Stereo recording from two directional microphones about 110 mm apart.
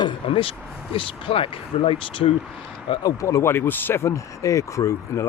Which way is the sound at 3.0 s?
30° left (ahead or behind).